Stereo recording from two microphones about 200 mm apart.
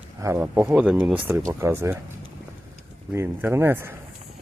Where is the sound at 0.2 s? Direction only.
10° right (ahead or behind).